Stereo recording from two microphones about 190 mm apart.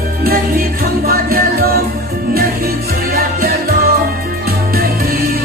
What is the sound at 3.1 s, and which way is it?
Music, 50° right (ahead or behind).